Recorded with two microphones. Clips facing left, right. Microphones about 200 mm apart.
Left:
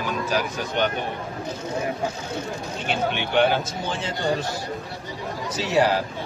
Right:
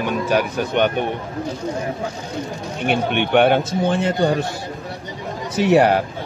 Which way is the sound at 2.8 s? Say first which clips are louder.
Right 7 dB; 60° right (ahead or behind).